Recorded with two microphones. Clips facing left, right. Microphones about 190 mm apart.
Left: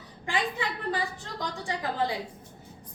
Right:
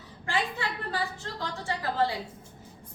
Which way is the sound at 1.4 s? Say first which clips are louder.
Left 1 dB; 15° left (ahead or behind).